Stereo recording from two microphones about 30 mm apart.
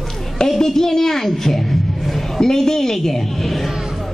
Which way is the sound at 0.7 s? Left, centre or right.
Centre.